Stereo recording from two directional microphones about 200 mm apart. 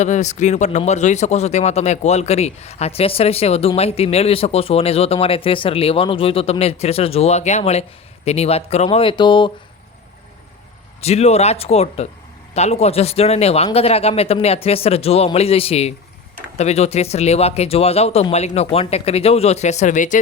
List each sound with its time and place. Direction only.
0.0 s speech: 35° left (ahead or behind)
11.0 s speech: 30° left (ahead or behind)